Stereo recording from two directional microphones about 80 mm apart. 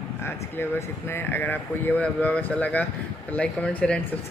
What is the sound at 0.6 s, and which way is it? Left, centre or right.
Speech, left.